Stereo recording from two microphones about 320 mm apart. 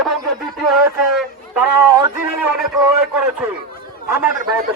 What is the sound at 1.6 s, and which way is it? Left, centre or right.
Speech, centre.